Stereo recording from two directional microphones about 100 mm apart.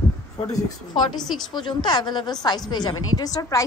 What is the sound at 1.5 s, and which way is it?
A woman's voice, 50° left (ahead or behind).